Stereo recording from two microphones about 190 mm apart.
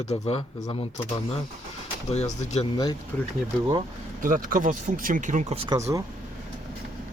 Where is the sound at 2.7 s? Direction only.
20° left (ahead or behind).